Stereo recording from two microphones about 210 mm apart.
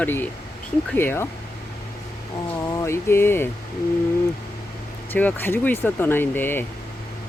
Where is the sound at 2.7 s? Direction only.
15° left (ahead or behind).